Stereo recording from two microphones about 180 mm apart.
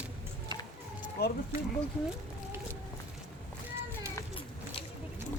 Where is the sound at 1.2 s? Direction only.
60° left (ahead or behind).